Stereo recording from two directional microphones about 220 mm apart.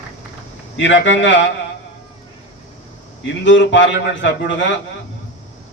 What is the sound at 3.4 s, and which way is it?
A man's voice, 55° left (ahead or behind).